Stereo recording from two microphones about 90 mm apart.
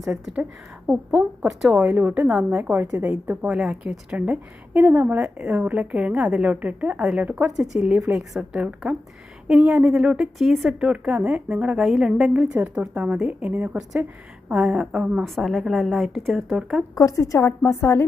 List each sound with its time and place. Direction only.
0.9 s a woman's voice: 5° right (ahead or behind)
4.7 s a woman's voice: 20° right (ahead or behind); by 10.8 s centre (ahead or behind)
10.8 s a woman's voice: 15° right (ahead or behind)
16.9 s a woman's voice: 40° left (ahead or behind)